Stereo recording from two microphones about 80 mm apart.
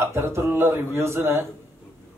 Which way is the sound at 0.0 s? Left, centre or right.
Right.